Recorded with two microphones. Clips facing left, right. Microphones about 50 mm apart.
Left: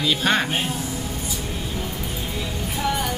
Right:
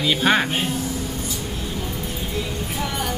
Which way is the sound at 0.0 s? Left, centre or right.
Centre.